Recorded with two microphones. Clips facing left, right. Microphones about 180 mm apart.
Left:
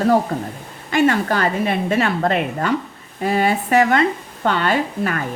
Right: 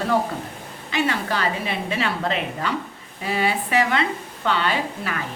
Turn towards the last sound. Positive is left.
turn(degrees=45)  # may be behind; listen again after turning